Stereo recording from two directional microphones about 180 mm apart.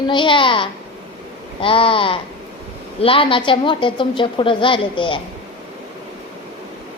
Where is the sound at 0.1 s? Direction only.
25° left (ahead or behind).